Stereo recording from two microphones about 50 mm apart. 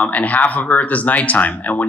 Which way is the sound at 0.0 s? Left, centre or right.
Left.